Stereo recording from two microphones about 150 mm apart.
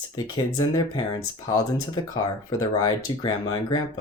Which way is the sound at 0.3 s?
30° left (ahead or behind).